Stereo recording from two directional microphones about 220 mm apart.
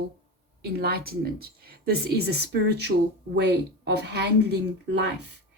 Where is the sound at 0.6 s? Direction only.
45° right (ahead or behind).